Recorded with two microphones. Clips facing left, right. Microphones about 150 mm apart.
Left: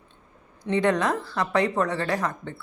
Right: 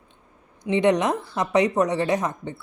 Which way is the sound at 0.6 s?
20° right (ahead or behind).